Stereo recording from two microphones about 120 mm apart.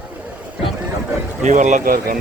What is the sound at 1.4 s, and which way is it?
Speech, 85° right.